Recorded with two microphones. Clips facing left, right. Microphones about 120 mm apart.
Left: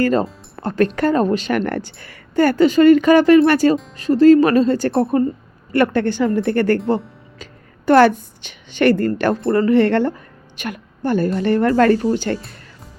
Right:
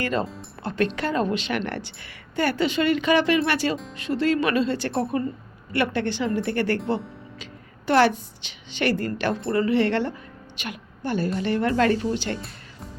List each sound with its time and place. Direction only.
0.0 s speech: 40° left (ahead or behind)
7.9 s a woman's voice: 45° left (ahead or behind)